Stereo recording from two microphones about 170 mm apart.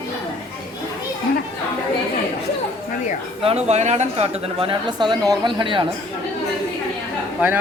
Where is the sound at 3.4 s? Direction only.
35° right (ahead or behind).